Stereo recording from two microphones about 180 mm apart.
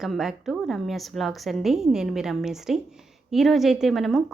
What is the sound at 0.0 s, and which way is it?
A woman's voice, centre (ahead or behind).